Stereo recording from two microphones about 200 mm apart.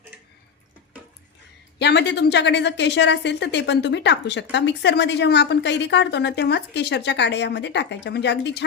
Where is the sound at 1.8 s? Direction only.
60° left (ahead or behind).